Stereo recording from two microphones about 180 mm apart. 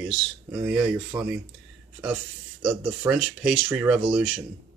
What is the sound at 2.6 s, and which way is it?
Speech, centre (ahead or behind).